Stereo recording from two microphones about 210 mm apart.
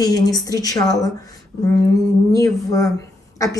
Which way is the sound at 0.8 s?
Centre (ahead or behind).